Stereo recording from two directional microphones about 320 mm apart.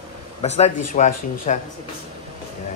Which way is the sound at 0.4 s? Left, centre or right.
Centre.